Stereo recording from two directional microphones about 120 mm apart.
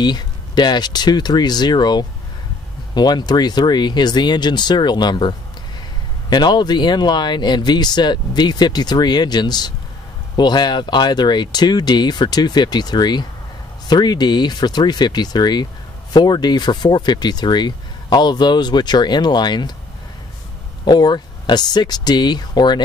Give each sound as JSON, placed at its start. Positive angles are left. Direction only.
{"t": 0.0, "sound": "speech", "side_deg": 35}
{"t": 6.3, "sound": "speech", "side_deg": 35}
{"t": 20.8, "sound": "speech", "side_deg": 35}